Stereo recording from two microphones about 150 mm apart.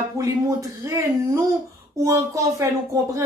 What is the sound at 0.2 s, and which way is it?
A woman's voice, 20° right (ahead or behind).